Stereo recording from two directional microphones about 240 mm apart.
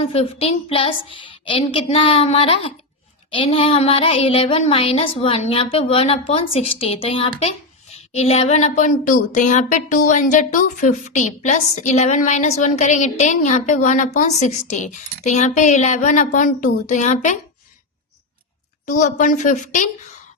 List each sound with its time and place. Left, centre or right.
0.0 s speech: left
18.9 s a woman's voice: left